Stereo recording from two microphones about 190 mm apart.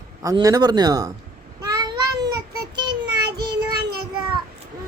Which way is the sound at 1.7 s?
20° right (ahead or behind).